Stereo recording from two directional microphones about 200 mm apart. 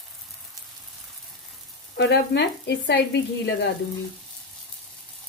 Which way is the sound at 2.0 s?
60° left (ahead or behind).